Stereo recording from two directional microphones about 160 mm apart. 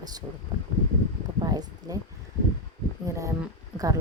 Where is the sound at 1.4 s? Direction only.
25° right (ahead or behind).